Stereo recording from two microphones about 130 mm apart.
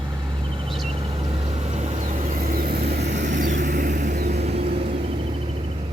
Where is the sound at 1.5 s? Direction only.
60° right (ahead or behind).